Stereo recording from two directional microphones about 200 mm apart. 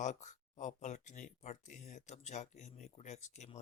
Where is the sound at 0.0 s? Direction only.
35° left (ahead or behind).